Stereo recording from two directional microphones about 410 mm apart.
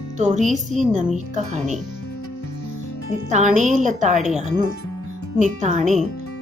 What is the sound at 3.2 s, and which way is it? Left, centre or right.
Speech, centre.